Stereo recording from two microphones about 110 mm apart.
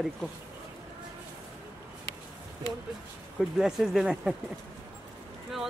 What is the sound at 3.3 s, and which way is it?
Speech, 5° right (ahead or behind).